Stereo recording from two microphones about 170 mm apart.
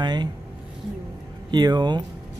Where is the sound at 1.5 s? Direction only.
25° right (ahead or behind).